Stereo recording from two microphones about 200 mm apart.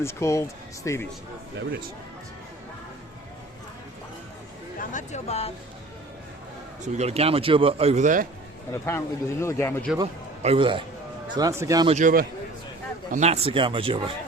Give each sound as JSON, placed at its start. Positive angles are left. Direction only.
{"t": 0.0, "sound": "a man's voice", "side_deg": 15}
{"t": 4.9, "sound": "speech", "side_deg": 35}
{"t": 6.8, "sound": "a man's voice", "side_deg": -35}
{"t": 8.7, "sound": "a man's voice", "side_deg": 10}
{"t": 10.0, "sound": "a man's voice", "side_deg": -25}
{"t": 11.9, "sound": "a man's voice", "side_deg": -40}